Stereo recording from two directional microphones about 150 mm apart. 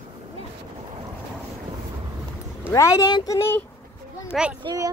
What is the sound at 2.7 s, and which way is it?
Speech, 20° left (ahead or behind).